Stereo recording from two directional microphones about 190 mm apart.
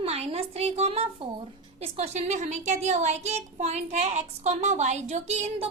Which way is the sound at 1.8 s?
35° right (ahead or behind).